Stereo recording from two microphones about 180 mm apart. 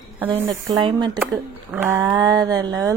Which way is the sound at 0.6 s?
25° right (ahead or behind).